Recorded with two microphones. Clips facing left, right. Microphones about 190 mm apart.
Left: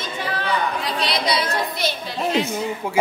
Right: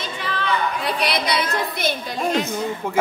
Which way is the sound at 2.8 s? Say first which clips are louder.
Even; 10° left (ahead or behind).